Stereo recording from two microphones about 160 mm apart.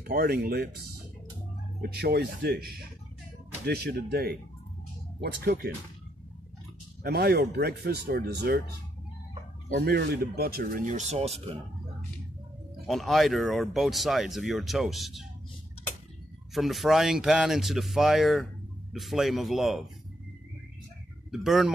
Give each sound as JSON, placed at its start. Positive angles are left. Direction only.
{"t": 0.0, "sound": "speech", "side_deg": -75}
{"t": 1.8, "sound": "speech", "side_deg": -85}
{"t": 3.6, "sound": "speech", "side_deg": -85}
{"t": 7.0, "sound": "speech", "side_deg": -75}
{"t": 9.8, "sound": "speech", "side_deg": -85}
{"t": 12.8, "sound": "speech", "side_deg": 0}
{"t": 16.5, "sound": "speech", "side_deg": 0}
{"t": 21.3, "sound": "speech", "side_deg": 0}